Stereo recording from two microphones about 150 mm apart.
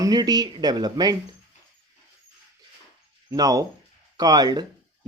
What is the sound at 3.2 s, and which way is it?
Speech, 25° right (ahead or behind).